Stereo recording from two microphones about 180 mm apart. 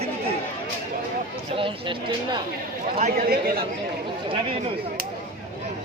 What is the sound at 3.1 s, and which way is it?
Speech, 55° right (ahead or behind).